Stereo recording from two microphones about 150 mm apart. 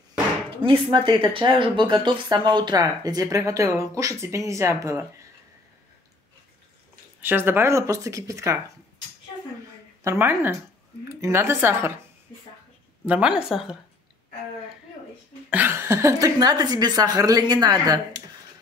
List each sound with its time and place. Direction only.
0.6 s speech: 35° right (ahead or behind); by 5.0 s 20° right (ahead or behind)
7.2 s speech: 15° right (ahead or behind)
10.0 s speech: 15° right (ahead or behind)
13.0 s a woman's voice: 10° right (ahead or behind)
15.5 s speech: 15° right (ahead or behind)